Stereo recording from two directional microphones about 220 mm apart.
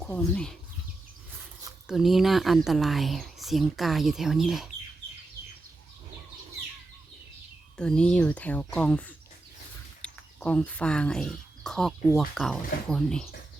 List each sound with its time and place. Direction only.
0.0 s speech: 5° left (ahead or behind)
1.9 s speech: centre (ahead or behind)
7.8 s speech: 5° left (ahead or behind)